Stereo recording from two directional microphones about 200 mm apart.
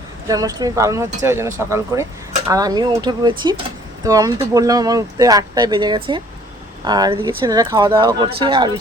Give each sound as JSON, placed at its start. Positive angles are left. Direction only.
{"t": 0.3, "sound": "speech", "side_deg": -15}